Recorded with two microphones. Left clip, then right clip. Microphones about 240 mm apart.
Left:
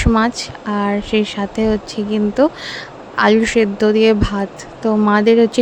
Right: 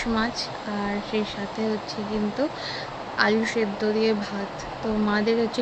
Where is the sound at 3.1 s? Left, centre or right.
Left.